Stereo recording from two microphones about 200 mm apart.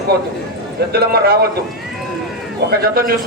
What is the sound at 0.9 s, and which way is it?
Speech, 50° right (ahead or behind).